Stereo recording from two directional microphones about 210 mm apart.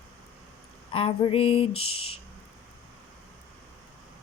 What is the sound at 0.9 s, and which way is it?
Speech, 25° left (ahead or behind).